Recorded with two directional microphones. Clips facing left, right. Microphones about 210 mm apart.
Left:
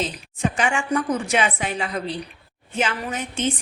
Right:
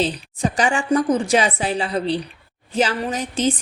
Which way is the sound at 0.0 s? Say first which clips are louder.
Right 4 dB; 35° right (ahead or behind).